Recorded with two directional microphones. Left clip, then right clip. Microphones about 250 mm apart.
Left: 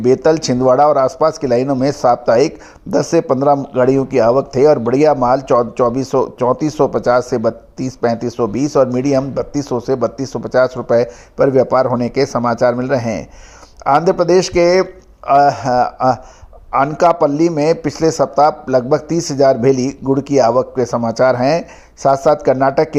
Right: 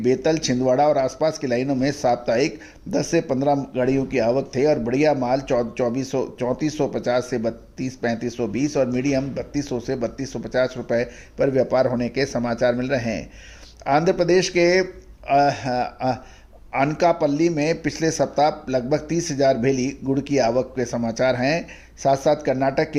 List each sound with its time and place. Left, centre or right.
0.0 s speech: centre